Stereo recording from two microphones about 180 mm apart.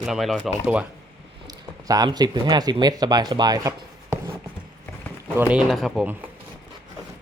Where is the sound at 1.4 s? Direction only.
20° right (ahead or behind).